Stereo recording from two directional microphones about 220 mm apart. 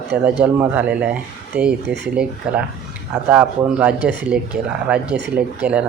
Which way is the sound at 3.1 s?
5° right (ahead or behind).